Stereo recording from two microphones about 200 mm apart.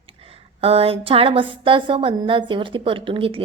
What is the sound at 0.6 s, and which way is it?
A woman's voice, 30° right (ahead or behind).